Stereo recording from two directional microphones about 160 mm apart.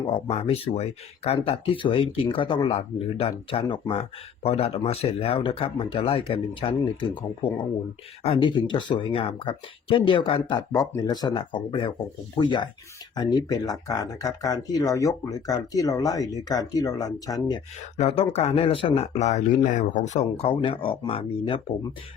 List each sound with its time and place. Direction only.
0.3 s speech: 40° left (ahead or behind)
10.7 s speech: 20° left (ahead or behind)
17.9 s speech: 40° left (ahead or behind)
20.3 s speech: 35° left (ahead or behind)